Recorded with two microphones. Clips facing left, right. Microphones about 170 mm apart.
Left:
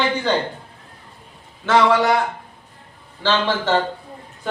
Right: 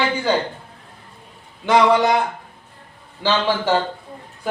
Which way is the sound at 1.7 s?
15° right (ahead or behind).